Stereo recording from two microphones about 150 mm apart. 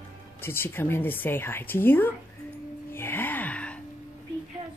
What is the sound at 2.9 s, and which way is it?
Gasp, 15° left (ahead or behind).